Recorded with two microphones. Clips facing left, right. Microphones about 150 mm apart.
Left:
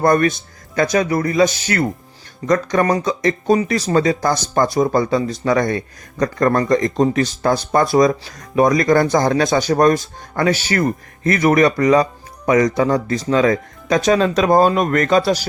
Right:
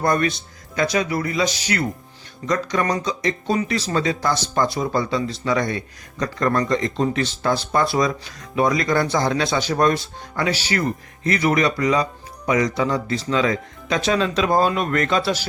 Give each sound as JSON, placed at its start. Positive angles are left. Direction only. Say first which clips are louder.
{"t": 0.0, "sound": "speech", "louder": "left 5 dB", "side_deg": 50}